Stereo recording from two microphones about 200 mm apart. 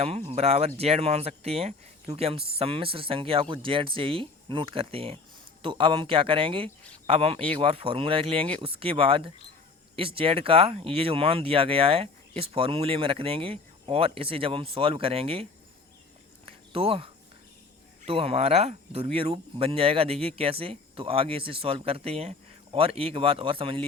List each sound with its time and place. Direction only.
0.0 s speech: 30° right (ahead or behind)
16.5 s a sound: 30° right (ahead or behind)
18.0 s speech: 30° right (ahead or behind)